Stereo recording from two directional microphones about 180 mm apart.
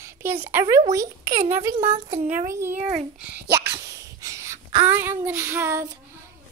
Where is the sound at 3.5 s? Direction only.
20° right (ahead or behind).